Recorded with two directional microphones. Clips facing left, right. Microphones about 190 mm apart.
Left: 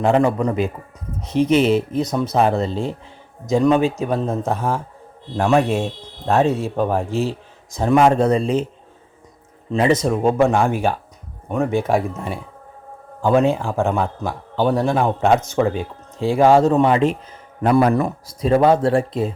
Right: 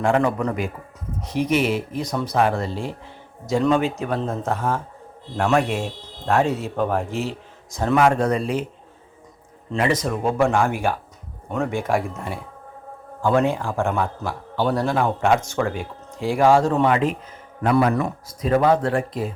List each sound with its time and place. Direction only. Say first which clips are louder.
0.0 s a man's voice: left 3 dB; 20° left (ahead or behind)
7.1 s speech: left 5 dB; 15° right (ahead or behind)
7.7 s speech: left 3 dB; 15° left (ahead or behind)
9.7 s a man's voice: left 5 dB; 25° left (ahead or behind)